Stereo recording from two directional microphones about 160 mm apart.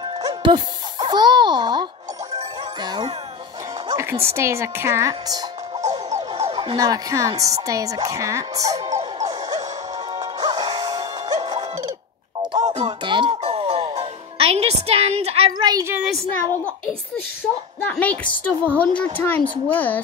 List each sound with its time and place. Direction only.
0.2 s a child's voice: 25° right (ahead or behind)
2.3 s music: 25° right (ahead or behind)
3.9 s music: 15° right (ahead or behind)
4.3 s speech: 15° right (ahead or behind)
10.1 s music: 25° right (ahead or behind)
12.5 s music: 45° right (ahead or behind)
15.7 s speech: 15° right (ahead or behind)
17.8 s a woman's voice: 10° left (ahead or behind)